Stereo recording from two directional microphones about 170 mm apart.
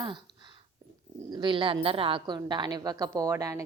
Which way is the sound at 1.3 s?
30° right (ahead or behind).